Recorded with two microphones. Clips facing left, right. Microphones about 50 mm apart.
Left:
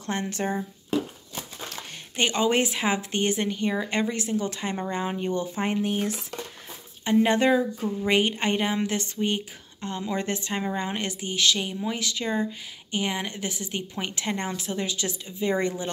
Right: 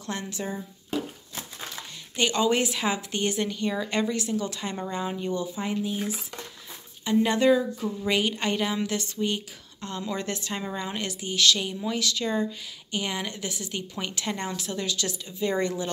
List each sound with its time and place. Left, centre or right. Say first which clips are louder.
0.0 s speech: left 4 dB; left
0.4 s speech: left 5 dB; left
2.1 s speech: left 1 dB; left
5.9 s speech: left 3 dB; left
7.1 s speech: left 1 dB; left